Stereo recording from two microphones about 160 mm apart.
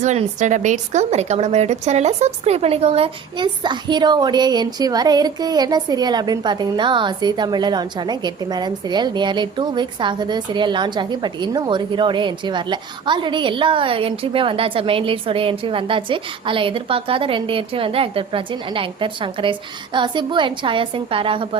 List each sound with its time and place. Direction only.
0.0 s a woman's voice: 45° right (ahead or behind)